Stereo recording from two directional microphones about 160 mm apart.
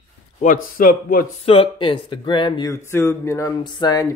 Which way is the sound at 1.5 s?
30° left (ahead or behind).